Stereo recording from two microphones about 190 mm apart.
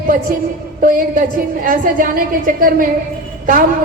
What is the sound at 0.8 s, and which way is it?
A woman's voice, 45° right (ahead or behind).